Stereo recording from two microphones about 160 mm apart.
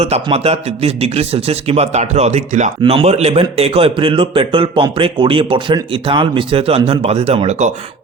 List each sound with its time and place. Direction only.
0.0 s speech: 35° right (ahead or behind)